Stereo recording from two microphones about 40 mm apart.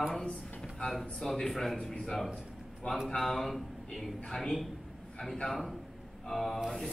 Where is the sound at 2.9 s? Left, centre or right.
Left.